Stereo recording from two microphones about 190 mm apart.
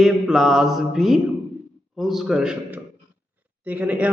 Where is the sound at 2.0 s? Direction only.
Centre (ahead or behind).